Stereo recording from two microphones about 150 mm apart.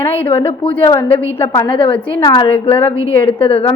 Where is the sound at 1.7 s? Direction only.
35° left (ahead or behind).